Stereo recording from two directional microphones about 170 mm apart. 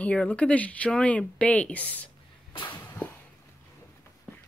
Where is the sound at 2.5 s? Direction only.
25° left (ahead or behind).